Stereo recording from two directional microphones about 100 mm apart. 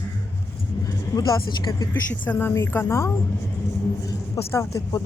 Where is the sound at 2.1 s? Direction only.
15° left (ahead or behind).